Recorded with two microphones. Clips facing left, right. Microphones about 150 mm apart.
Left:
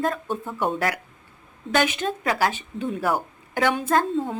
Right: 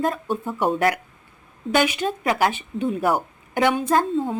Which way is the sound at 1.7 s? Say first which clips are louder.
Right 2 dB; 10° right (ahead or behind).